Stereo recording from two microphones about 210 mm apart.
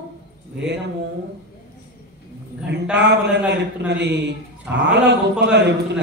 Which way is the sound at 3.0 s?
55° right (ahead or behind).